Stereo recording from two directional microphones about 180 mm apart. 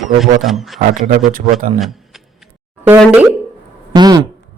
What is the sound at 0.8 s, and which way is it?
Speech, 45° right (ahead or behind).